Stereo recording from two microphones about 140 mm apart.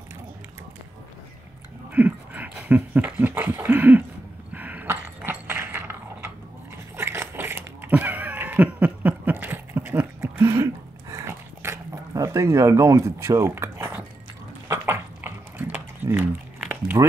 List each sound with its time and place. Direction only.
1.9 s a sound: 10° right (ahead or behind)
4.5 s dog: 10° right (ahead or behind)
7.0 s cat: 20° right (ahead or behind)
14.7 s dog: 15° right (ahead or behind)